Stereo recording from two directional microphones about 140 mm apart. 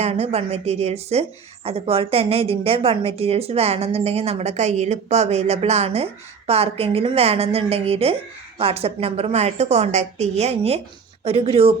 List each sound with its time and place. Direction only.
0.0 s a woman's voice: 50° right (ahead or behind)